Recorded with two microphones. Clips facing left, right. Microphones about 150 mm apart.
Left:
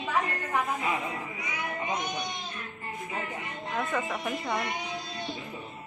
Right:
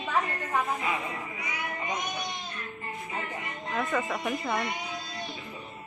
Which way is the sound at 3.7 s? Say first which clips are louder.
Right 1 dB; centre (ahead or behind).